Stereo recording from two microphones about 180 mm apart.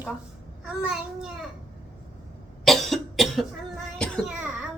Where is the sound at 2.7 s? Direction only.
Centre (ahead or behind).